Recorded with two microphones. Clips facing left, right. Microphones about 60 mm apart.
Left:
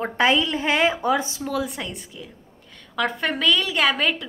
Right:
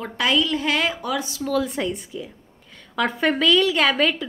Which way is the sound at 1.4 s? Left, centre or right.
Centre.